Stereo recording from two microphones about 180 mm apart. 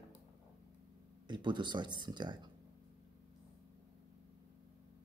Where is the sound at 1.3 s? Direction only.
25° right (ahead or behind).